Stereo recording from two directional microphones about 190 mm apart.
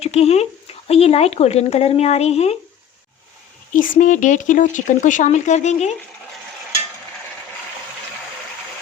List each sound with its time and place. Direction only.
0.0 s speech: 35° left (ahead or behind)
3.7 s speech: 40° left (ahead or behind)